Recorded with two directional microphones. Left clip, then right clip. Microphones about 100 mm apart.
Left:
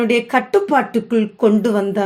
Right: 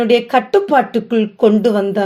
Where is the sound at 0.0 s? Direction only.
30° right (ahead or behind).